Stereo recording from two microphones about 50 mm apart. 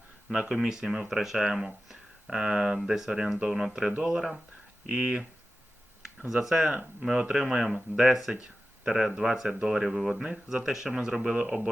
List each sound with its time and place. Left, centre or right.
0.3 s speech: centre
4.9 s speech: right
6.2 s speech: centre